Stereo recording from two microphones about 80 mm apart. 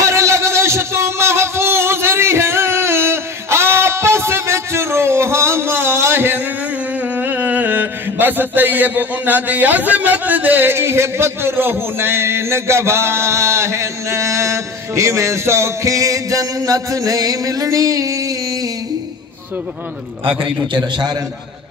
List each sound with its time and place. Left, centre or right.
0.0 s a sound: right
7.2 s mantra: right
20.2 s a man's voice: right